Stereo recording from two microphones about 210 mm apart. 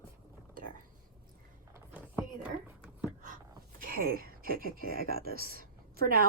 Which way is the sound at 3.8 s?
45° right (ahead or behind).